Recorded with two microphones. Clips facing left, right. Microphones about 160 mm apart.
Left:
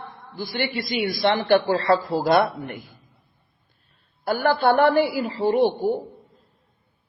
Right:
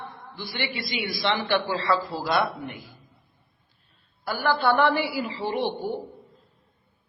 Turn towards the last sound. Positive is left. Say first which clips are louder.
# left 8 dB
turn(degrees=45)  # may be behind; listen again after turning